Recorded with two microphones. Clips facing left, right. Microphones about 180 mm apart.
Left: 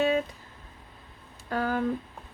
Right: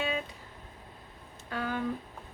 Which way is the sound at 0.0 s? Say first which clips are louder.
Left 8 dB; 45° left (ahead or behind).